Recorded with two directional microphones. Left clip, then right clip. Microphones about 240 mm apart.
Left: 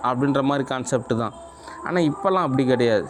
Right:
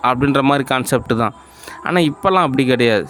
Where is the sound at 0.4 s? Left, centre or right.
Right.